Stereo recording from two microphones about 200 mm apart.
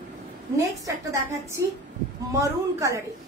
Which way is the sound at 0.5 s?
15° right (ahead or behind).